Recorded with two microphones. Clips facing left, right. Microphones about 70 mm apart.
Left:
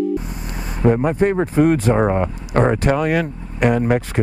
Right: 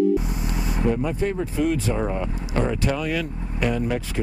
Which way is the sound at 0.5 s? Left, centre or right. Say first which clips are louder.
Left 7 dB; left.